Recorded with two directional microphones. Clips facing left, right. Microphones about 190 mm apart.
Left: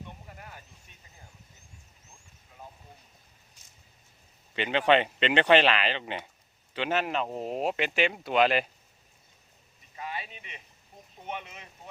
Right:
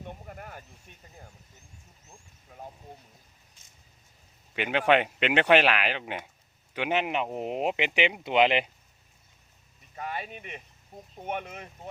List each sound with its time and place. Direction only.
0.3 s a sound: 50° right (ahead or behind)
4.5 s speech: 10° right (ahead or behind)
10.0 s speech: 50° right (ahead or behind)